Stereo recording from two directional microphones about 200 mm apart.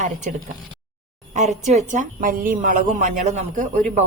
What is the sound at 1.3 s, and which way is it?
A woman's voice, 35° right (ahead or behind).